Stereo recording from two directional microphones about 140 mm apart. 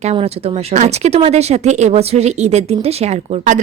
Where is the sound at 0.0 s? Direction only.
50° right (ahead or behind).